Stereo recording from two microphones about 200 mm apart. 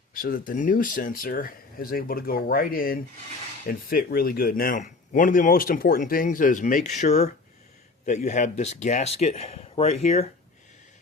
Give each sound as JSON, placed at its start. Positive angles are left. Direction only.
{"t": 0.1, "sound": "speech", "side_deg": 45}